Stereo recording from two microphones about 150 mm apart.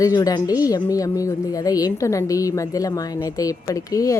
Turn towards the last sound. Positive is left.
turn(degrees=20)  # may be behind; listen again after turning